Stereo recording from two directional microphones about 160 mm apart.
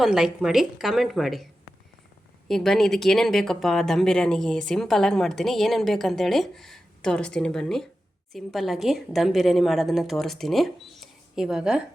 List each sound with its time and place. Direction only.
0.0 s speech: 5° right (ahead or behind)
2.5 s speech: centre (ahead or behind)